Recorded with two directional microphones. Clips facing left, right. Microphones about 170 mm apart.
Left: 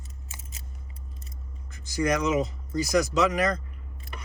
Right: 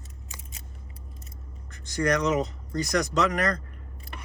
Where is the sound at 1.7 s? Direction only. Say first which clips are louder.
Even; 5° left (ahead or behind).